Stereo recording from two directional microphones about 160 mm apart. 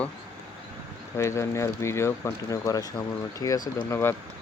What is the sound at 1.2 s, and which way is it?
Speech, 15° left (ahead or behind).